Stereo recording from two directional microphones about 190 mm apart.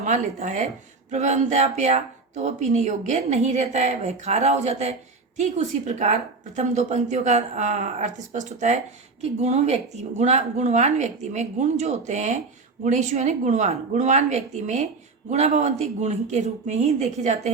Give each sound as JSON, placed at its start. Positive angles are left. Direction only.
{"t": 0.0, "sound": "speech", "side_deg": -40}